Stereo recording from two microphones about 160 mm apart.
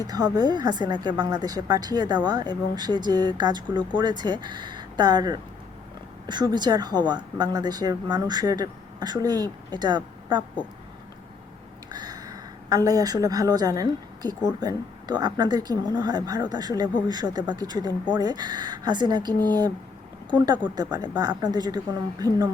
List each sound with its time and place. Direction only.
0.3 s speech: 25° right (ahead or behind)
11.9 s speech: 25° right (ahead or behind)